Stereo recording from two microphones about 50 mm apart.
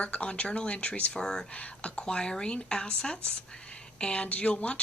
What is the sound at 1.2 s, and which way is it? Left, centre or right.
Speech, centre.